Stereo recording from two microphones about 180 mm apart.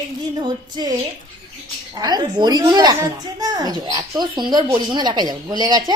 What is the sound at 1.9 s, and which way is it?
A woman's voice, 20° right (ahead or behind).